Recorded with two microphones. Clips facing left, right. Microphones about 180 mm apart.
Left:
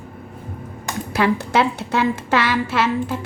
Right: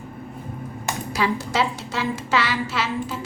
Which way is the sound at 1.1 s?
60° left (ahead or behind).